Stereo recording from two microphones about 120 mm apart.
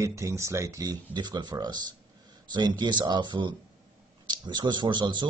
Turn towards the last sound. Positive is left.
turn(degrees=-40)  # may be behind; listen again after turning